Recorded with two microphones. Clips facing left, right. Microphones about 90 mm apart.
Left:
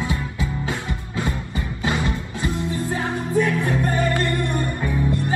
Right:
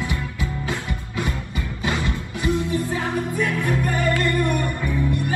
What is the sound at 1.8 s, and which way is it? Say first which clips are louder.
Music: left 1 dB; 20° left (ahead or behind).